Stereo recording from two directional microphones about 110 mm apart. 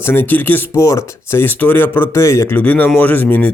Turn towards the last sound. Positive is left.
turn(degrees=15)  # may be behind; listen again after turning